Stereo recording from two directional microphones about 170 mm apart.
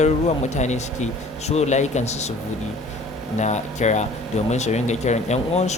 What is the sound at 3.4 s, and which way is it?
Speech, 45° left (ahead or behind).